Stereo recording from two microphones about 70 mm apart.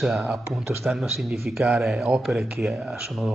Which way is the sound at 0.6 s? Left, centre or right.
Centre.